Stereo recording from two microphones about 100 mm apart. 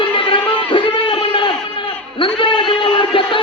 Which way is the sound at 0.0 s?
55° left (ahead or behind).